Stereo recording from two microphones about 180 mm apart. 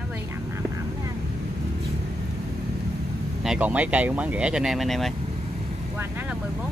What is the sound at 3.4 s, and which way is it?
Speech, 10° right (ahead or behind).